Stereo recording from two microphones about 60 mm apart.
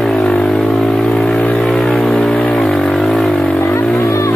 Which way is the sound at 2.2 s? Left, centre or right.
Centre.